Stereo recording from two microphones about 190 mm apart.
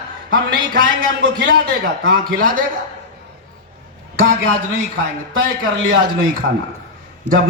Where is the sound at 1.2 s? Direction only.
70° right (ahead or behind).